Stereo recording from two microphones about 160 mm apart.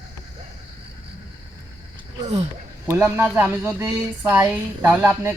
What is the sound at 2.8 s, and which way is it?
Speech, 15° right (ahead or behind).